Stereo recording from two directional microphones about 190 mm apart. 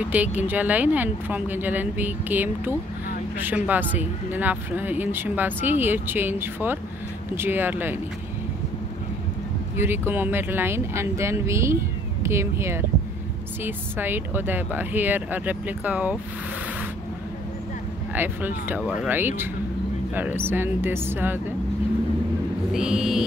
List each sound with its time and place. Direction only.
0.1 s speech: 10° right (ahead or behind)
9.8 s speech: 10° right (ahead or behind)
18.1 s speech: 10° right (ahead or behind)
22.7 s a sound: 5° right (ahead or behind)